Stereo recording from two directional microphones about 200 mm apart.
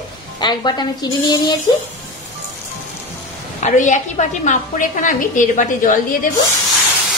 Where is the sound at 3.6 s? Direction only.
35° left (ahead or behind).